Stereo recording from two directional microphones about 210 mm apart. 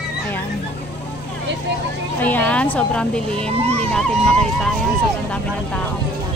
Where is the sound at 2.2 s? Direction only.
10° left (ahead or behind).